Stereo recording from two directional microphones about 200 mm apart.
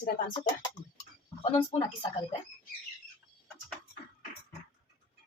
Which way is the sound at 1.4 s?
20° left (ahead or behind).